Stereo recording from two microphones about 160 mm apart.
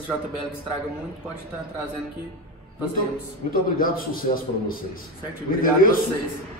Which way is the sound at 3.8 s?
60° left (ahead or behind).